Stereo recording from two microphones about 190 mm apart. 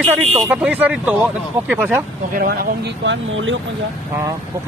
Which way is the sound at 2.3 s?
50° right (ahead or behind).